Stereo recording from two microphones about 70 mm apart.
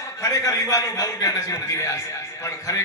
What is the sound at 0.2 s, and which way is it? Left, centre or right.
A man's voice, left.